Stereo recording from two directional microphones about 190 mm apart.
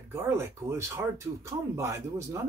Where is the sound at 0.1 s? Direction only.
15° right (ahead or behind).